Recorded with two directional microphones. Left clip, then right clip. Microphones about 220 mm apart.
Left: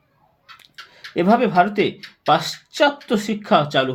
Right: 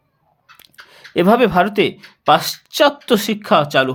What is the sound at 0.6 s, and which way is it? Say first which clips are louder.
Speech: left 1 dB; 35° right (ahead or behind).